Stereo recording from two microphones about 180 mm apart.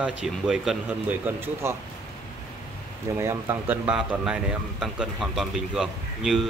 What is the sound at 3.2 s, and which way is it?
A man's voice, 15° right (ahead or behind).